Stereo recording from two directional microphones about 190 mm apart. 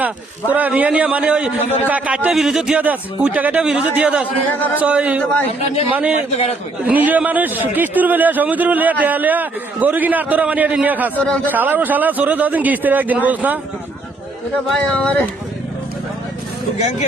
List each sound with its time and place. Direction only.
0.0 s a man's voice: 10° right (ahead or behind)
5.2 s a man's voice: 10° left (ahead or behind)
5.5 s speech: 30° left (ahead or behind)
5.9 s a man's voice: 5° right (ahead or behind)
6.3 s speech: 35° left (ahead or behind)
6.8 s a man's voice: 10° right (ahead or behind)
11.1 s a man's voice: 10° left (ahead or behind)
11.5 s a man's voice: 10° right (ahead or behind)
14.9 s a man's voice: 5° left (ahead or behind)
16.7 s speech: 35° left (ahead or behind)